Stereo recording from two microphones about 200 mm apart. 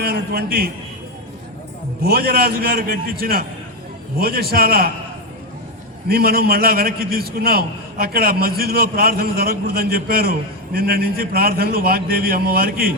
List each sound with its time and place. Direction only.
0.0 s a man's voice: 50° right (ahead or behind)
2.0 s a man's voice: 50° right (ahead or behind)
6.1 s a man's voice: 50° right (ahead or behind)